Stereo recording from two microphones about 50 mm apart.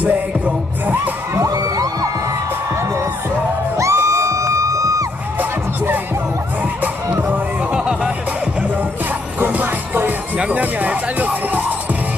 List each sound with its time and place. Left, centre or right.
1.3 s a sound: right
3.7 s music: right
6.8 s music: right
7.7 s music: right
9.4 s music: right